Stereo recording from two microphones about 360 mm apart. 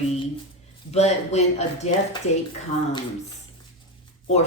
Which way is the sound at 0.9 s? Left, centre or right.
Centre.